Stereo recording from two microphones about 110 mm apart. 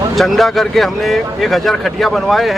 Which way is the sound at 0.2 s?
Centre (ahead or behind).